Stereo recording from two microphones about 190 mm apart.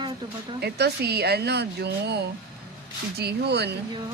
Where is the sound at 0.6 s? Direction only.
60° right (ahead or behind).